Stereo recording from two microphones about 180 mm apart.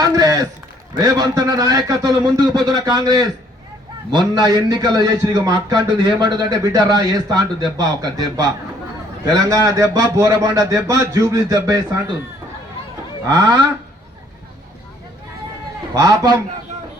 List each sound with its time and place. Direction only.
0.0 s run: 20° right (ahead or behind)
0.9 s a man's voice: 20° right (ahead or behind)
13.2 s a man's voice: 20° right (ahead or behind)
16.0 s a man's voice: 20° right (ahead or behind)